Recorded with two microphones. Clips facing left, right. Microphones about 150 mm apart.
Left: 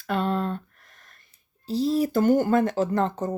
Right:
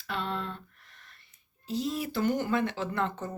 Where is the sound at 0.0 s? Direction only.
45° left (ahead or behind).